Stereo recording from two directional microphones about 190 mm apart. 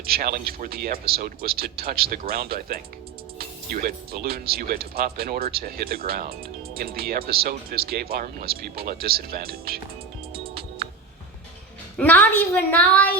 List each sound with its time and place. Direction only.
0.0 s speech: 55° right (ahead or behind)
10.3 s music: 55° right (ahead or behind)
11.9 s a woman's voice: 10° left (ahead or behind)